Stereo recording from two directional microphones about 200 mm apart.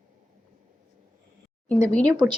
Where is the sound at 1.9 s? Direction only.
5° left (ahead or behind).